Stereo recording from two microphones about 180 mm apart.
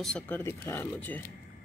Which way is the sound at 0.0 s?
5° left (ahead or behind).